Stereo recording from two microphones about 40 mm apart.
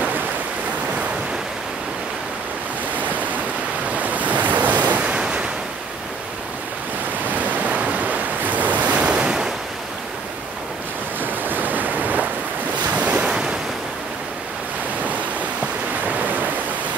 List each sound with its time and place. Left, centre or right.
3.9 s waves: right
5.0 s waves: right
7.2 s waves: right
11.4 s waves: right
13.2 s waves: right